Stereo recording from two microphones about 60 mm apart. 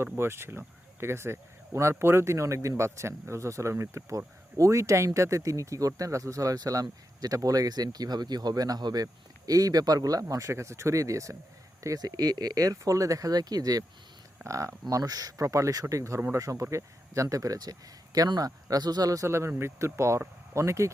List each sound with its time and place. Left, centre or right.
0.0 s speech: right
4.5 s speech: right
11.8 s speech: right
14.4 s speech: right
19.3 s speech: right